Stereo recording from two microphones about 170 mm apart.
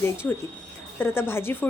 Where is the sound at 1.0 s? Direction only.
15° left (ahead or behind).